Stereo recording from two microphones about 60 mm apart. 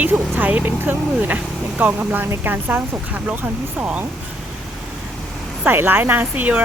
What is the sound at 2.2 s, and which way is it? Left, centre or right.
Speech, right.